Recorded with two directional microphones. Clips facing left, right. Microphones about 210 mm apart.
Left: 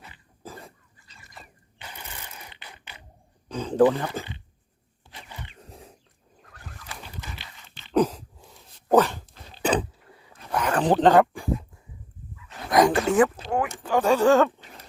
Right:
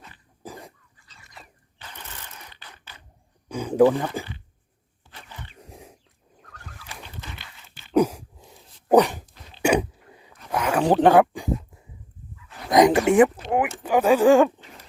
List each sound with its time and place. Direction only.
0.4 s cough: 15° right (ahead or behind)
0.9 s fowl: centre (ahead or behind)
1.8 s a sound: 10° left (ahead or behind)
3.5 s speech: 10° right (ahead or behind)
5.1 s wild animals: 15° left (ahead or behind)
5.5 s dog: 15° right (ahead or behind)
6.4 s fowl: 5° left (ahead or behind)
7.9 s a sound: 10° right (ahead or behind)
8.9 s dog: 15° right (ahead or behind)
11.0 s speech: 10° right (ahead or behind)
12.7 s a sound: 20° right (ahead or behind)